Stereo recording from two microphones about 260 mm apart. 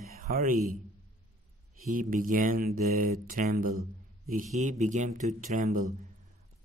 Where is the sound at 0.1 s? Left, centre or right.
Right.